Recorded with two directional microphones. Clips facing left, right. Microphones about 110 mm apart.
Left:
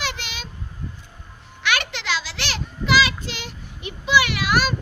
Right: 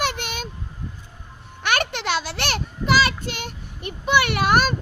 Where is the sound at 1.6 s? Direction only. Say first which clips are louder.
Right 2 dB; 45° right (ahead or behind).